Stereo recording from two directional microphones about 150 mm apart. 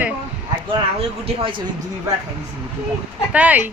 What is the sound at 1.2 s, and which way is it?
Speech, 35° right (ahead or behind).